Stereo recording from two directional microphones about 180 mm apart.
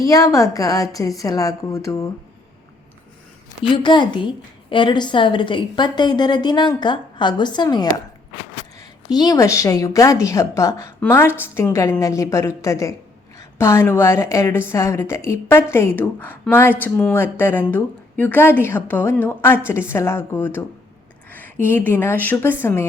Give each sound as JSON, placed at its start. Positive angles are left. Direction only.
{"t": 0.0, "sound": "a woman's voice", "side_deg": 20}
{"t": 3.6, "sound": "a woman's voice", "side_deg": 25}
{"t": 9.0, "sound": "a woman's voice", "side_deg": 20}